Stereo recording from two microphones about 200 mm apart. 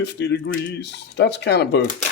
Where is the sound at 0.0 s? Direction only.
60° left (ahead or behind).